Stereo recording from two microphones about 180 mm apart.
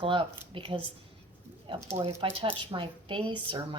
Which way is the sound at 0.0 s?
30° right (ahead or behind).